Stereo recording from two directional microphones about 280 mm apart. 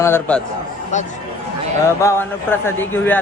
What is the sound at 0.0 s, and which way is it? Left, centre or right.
Speech, centre.